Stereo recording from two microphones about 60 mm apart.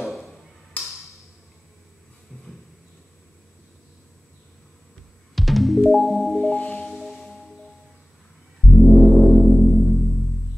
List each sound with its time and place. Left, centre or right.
0.0 s a sound: centre
0.8 s a sound: left
5.3 s music: centre
6.4 s music: centre
6.9 s music: centre
8.7 s music: centre